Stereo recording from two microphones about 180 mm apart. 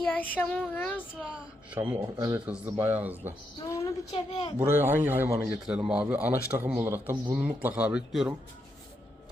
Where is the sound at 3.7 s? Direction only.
15° left (ahead or behind).